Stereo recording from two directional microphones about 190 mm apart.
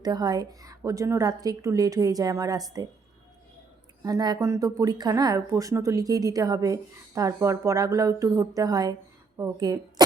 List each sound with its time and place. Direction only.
0.0 s speech: 20° right (ahead or behind)
4.0 s speech: 20° right (ahead or behind)